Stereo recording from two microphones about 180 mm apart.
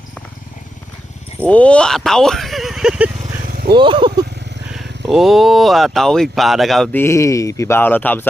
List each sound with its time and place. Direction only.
1.4 s speech: 5° left (ahead or behind)
3.5 s vehicle: 55° right (ahead or behind)
3.8 s speech: 25° right (ahead or behind)
4.7 s speech: centre (ahead or behind)
7.0 s speech: 15° left (ahead or behind)